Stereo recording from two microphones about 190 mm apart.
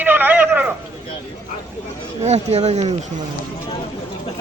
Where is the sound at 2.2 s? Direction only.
35° right (ahead or behind).